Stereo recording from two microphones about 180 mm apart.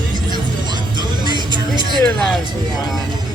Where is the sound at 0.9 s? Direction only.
25° right (ahead or behind).